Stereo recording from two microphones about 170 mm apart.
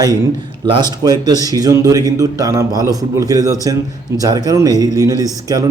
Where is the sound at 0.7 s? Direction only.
25° right (ahead or behind).